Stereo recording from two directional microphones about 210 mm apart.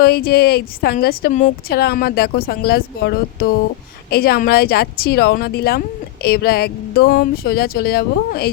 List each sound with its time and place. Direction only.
0.0 s speech: 45° left (ahead or behind)
1.7 s speech: 50° left (ahead or behind)